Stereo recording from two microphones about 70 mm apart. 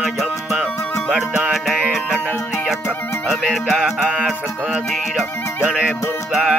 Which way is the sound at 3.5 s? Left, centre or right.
Centre.